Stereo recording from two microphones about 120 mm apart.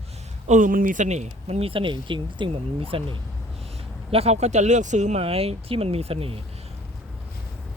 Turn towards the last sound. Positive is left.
turn(degrees=-50)  # may be behind; listen again after turning